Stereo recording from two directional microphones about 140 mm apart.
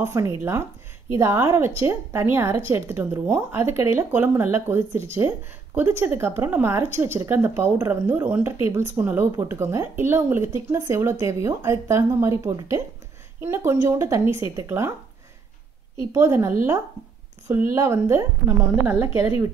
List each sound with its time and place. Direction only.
0.0 s speech: 20° right (ahead or behind)
16.1 s speech: 20° right (ahead or behind)